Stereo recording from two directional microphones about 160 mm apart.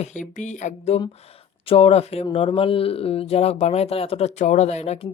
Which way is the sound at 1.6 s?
35° left (ahead or behind).